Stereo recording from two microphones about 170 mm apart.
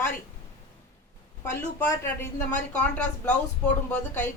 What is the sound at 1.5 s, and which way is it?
Speech, 15° left (ahead or behind).